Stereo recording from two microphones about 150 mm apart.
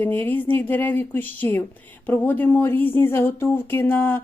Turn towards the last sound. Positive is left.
turn(degrees=15)  # may be behind; listen again after turning